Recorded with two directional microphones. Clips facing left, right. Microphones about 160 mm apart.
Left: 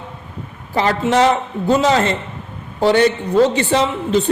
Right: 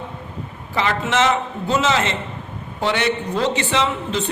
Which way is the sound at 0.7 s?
35° left (ahead or behind).